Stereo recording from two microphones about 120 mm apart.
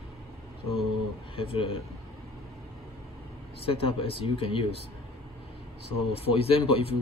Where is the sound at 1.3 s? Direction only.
50° left (ahead or behind).